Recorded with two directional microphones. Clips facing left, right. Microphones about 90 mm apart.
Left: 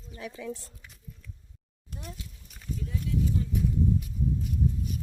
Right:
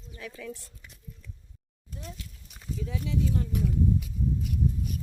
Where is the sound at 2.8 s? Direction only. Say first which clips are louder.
Even; 90° right.